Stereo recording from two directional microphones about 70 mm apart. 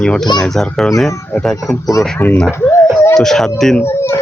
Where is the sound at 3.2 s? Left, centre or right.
Centre.